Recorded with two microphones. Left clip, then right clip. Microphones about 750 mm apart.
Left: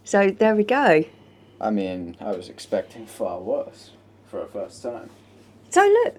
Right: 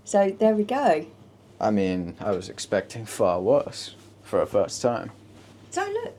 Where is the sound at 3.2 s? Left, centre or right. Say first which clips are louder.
Right 6 dB; right.